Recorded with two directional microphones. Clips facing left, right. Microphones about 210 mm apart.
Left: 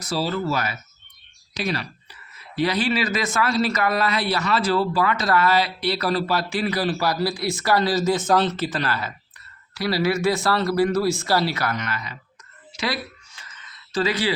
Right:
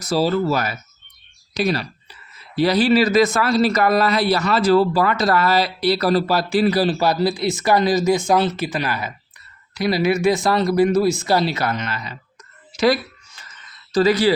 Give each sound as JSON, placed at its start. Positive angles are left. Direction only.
{"t": 0.0, "sound": "speech", "side_deg": -40}
{"t": 12.7, "sound": "a sound", "side_deg": -40}
{"t": 13.9, "sound": "speech", "side_deg": -40}